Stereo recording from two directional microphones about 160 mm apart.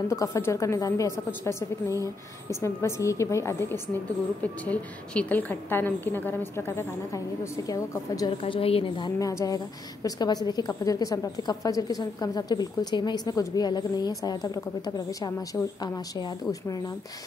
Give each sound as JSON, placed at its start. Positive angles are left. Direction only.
{"t": 0.1, "sound": "a woman's voice", "side_deg": 20}
{"t": 8.4, "sound": "a woman's voice", "side_deg": 35}